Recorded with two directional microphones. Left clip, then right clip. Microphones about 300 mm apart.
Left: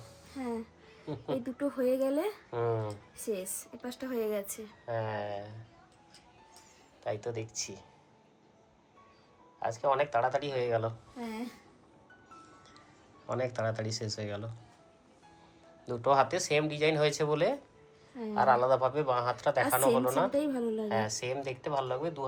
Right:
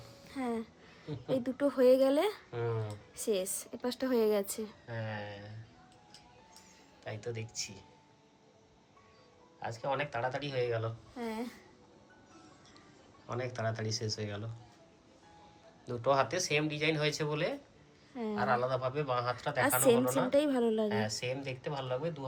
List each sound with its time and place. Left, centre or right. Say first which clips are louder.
0.3 s music: right 1 dB; centre
1.0 s a woman's voice: right 1 dB; centre
1.6 s speech: right 5 dB; centre
2.5 s a woman's voice: left 5 dB; centre
3.8 s speech: right 5 dB; centre
4.9 s a woman's voice: left 11 dB; centre
7.0 s a woman's voice: left 6 dB; centre
9.6 s a woman's voice: left 6 dB; centre
13.2 s speech: left 4 dB; centre
15.9 s a woman's voice: left 3 dB; centre
20.3 s speech: right 3 dB; centre
20.7 s a woman's voice: left 1 dB; centre